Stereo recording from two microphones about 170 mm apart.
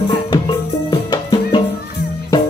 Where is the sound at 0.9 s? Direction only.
25° left (ahead or behind).